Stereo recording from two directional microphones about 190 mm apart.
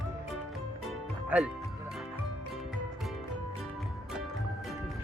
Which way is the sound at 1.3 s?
5° right (ahead or behind).